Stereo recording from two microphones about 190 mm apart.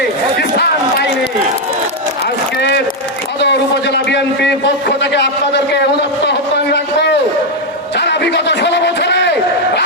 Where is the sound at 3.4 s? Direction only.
65° left (ahead or behind).